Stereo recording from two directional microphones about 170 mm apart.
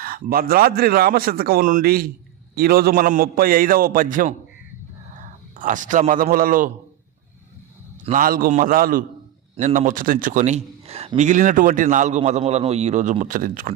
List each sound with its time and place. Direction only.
0.0 s a man's voice: 60° right (ahead or behind)
5.1 s a sound: 50° right (ahead or behind)
6.3 s a man's voice: 55° right (ahead or behind)
8.1 s a man's voice: 55° right (ahead or behind)